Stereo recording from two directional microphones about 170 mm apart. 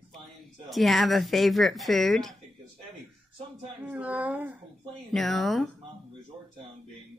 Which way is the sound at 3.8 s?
10° right (ahead or behind).